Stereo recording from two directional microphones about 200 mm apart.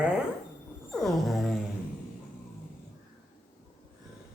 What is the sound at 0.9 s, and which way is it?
Music, centre (ahead or behind).